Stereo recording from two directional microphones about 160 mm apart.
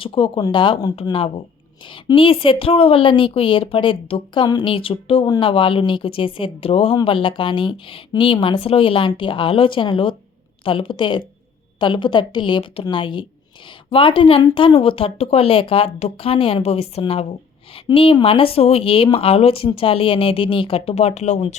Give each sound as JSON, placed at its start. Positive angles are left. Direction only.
{"t": 0.0, "sound": "speech", "side_deg": 30}